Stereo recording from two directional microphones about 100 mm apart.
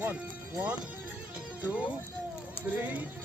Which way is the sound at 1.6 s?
15° right (ahead or behind).